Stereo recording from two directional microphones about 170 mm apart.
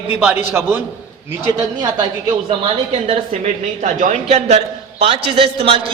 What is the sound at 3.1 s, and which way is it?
A man's voice, 40° right (ahead or behind).